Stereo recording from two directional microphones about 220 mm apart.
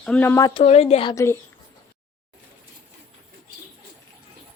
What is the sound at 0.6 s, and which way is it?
Speech, 30° left (ahead or behind).